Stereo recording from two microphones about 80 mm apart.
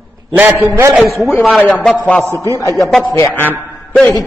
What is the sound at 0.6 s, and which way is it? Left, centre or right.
Speech, right.